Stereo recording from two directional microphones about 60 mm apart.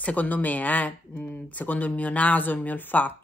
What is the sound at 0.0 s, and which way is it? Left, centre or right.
Speech, left.